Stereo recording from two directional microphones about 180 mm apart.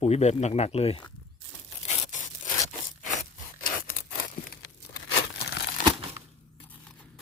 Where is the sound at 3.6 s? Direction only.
50° left (ahead or behind).